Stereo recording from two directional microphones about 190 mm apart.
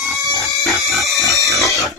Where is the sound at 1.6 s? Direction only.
Centre (ahead or behind).